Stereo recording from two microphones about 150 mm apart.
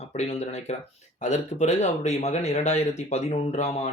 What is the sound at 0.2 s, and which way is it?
Speech, 45° left (ahead or behind).